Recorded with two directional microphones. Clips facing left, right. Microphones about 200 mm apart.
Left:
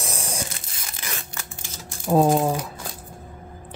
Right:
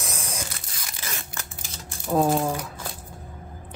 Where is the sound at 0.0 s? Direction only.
30° left (ahead or behind).